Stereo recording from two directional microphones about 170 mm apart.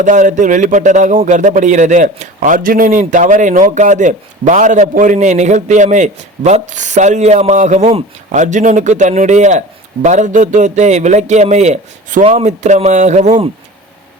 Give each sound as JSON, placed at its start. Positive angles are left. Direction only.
{"t": 0.0, "sound": "a man's voice", "side_deg": -45}